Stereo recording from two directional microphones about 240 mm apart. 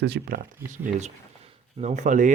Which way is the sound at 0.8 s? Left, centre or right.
Right.